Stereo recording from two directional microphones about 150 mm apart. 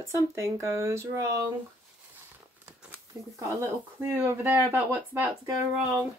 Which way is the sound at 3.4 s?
15° right (ahead or behind).